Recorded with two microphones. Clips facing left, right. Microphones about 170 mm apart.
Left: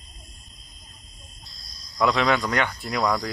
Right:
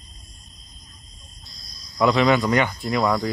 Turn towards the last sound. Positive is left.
turn(degrees=0)  # may be behind; listen again after turning